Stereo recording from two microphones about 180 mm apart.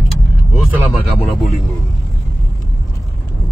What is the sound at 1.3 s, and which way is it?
Speech, centre (ahead or behind).